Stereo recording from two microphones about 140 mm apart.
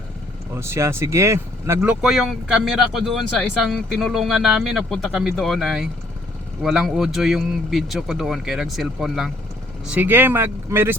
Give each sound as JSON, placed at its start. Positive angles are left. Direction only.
{"t": 0.5, "sound": "speech", "side_deg": -20}